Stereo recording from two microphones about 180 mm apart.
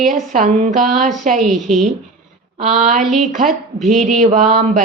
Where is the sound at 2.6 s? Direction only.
45° right (ahead or behind).